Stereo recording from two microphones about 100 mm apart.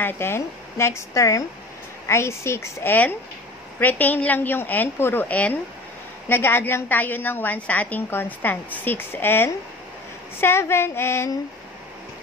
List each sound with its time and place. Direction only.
0.0 s a woman's voice: 25° left (ahead or behind)